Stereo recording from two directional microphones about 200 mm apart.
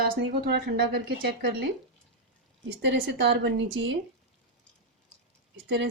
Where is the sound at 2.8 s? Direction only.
60° right (ahead or behind).